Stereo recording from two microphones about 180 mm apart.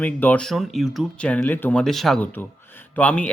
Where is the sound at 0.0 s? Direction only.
10° left (ahead or behind).